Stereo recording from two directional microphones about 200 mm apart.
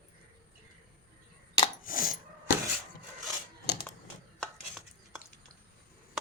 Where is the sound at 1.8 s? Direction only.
45° left (ahead or behind).